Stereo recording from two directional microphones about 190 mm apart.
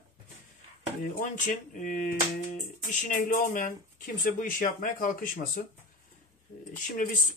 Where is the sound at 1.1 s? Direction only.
45° left (ahead or behind).